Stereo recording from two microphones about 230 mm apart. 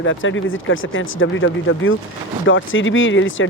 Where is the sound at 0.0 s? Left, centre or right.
Left.